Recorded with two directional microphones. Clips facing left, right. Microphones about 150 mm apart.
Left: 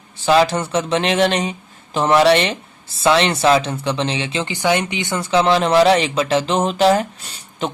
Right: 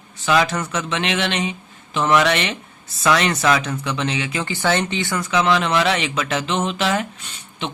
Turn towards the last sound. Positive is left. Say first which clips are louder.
# left 5 dB
turn(degrees=35)  # may be behind; listen again after turning